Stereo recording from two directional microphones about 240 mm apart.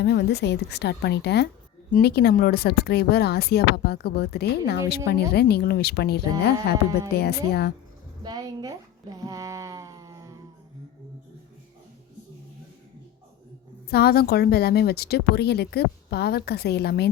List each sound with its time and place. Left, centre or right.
0.0 s a woman's voice: left
8.2 s a sound: centre
13.9 s speech: left